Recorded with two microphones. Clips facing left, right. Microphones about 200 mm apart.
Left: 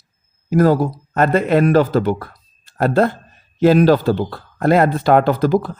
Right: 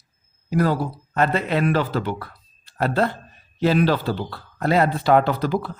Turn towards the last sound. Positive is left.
turn(degrees=45)  # may be behind; listen again after turning